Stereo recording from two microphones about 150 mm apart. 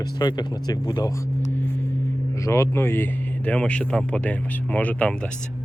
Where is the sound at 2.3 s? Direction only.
20° left (ahead or behind).